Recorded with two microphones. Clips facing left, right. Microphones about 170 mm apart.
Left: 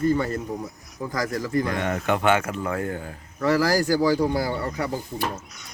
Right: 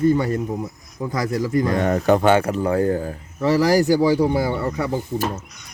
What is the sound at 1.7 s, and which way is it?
Speech, 40° right (ahead or behind).